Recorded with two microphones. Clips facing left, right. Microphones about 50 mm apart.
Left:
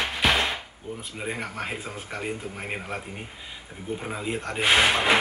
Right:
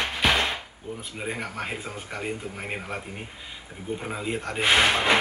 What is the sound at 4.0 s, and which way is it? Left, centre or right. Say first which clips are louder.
Speech: even; centre.